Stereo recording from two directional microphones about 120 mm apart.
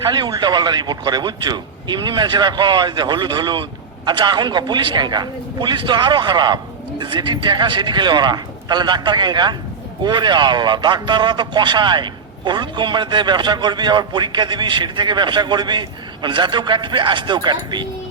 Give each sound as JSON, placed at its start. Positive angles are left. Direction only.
{"t": 0.1, "sound": "a man's voice", "side_deg": -40}